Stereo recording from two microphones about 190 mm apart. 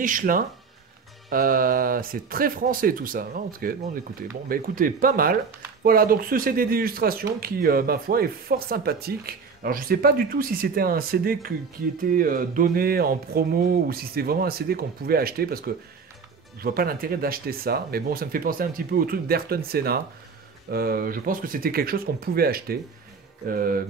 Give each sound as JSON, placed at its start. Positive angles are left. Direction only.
{"t": 0.0, "sound": "speech", "side_deg": -45}